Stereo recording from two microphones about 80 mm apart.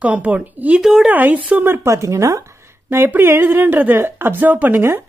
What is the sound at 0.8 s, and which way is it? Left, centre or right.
Speech, centre.